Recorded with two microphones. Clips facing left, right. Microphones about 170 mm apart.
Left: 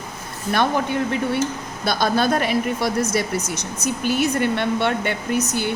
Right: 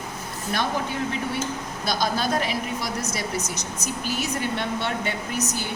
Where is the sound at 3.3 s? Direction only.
30° left (ahead or behind).